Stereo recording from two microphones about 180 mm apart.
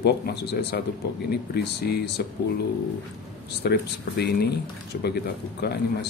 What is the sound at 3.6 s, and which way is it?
Speech, 65° left (ahead or behind).